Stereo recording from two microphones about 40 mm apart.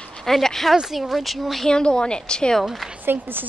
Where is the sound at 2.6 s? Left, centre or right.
Centre.